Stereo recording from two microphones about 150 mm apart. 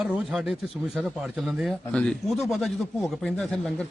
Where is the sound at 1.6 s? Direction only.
5° left (ahead or behind).